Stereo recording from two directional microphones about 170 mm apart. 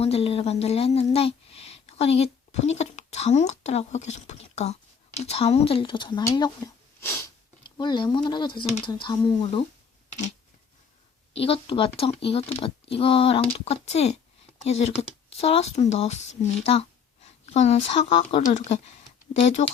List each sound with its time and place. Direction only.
0.0 s a woman's voice: 35° left (ahead or behind)
7.8 s speech: 25° left (ahead or behind)
11.3 s speech: 35° left (ahead or behind)